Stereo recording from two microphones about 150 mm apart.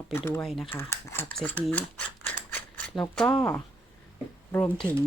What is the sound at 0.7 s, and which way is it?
Speech, 15° left (ahead or behind).